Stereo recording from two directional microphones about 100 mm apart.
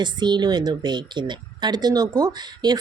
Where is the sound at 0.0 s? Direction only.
50° right (ahead or behind).